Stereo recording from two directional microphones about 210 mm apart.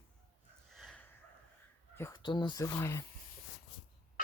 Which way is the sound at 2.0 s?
20° left (ahead or behind).